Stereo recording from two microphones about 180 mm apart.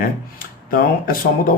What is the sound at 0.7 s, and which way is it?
Speech, 55° left (ahead or behind).